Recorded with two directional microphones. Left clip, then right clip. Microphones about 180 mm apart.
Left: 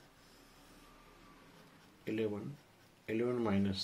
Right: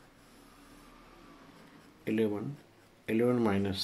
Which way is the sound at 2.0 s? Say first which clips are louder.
Right 6 dB; 20° right (ahead or behind).